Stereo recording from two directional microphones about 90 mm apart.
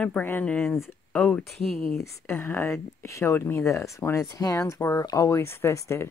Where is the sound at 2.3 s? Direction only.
25° left (ahead or behind).